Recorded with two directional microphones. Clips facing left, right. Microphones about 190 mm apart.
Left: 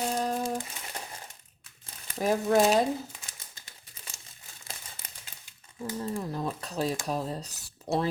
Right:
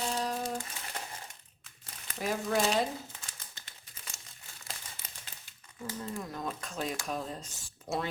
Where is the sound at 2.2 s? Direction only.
45° left (ahead or behind).